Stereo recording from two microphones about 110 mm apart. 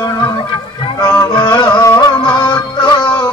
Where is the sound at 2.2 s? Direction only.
45° left (ahead or behind).